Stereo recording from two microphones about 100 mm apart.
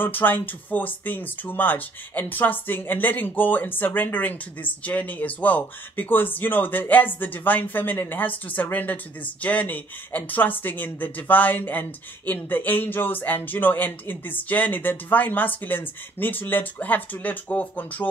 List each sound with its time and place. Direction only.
0.0 s speech: 20° left (ahead or behind)